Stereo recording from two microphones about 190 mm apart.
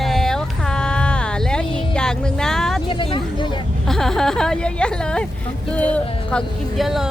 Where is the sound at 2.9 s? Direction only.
25° left (ahead or behind).